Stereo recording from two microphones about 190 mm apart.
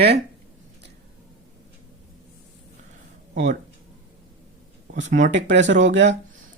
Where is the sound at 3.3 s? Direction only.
40° right (ahead or behind).